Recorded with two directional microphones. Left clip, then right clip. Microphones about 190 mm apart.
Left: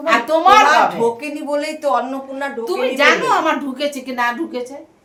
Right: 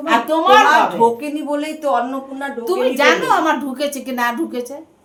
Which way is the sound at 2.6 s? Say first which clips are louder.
Even; 20° right (ahead or behind).